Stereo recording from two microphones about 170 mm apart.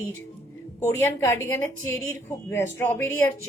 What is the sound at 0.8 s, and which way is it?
Speech, 15° left (ahead or behind).